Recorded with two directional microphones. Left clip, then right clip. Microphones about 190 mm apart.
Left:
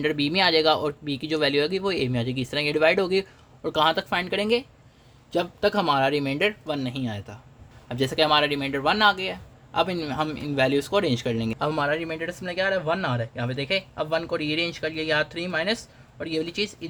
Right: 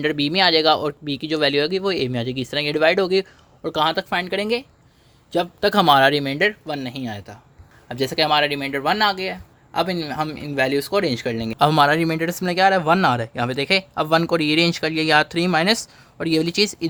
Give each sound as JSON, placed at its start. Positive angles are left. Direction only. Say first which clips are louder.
{"t": 0.0, "sound": "speech", "louder": "right 4 dB", "side_deg": -35}
{"t": 5.3, "sound": "speech", "louder": "right 4 dB", "side_deg": -40}
{"t": 11.6, "sound": "speech", "louder": "right 10 dB", "side_deg": -55}